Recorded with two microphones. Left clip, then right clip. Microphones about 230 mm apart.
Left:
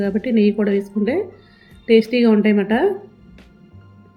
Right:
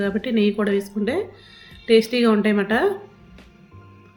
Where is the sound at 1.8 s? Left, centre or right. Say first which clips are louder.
Left 2 dB; centre.